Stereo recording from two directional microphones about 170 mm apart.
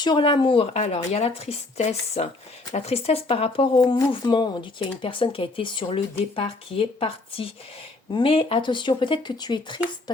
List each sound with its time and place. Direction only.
0.0 s speech: 30° left (ahead or behind)
3.8 s speech: 25° left (ahead or behind)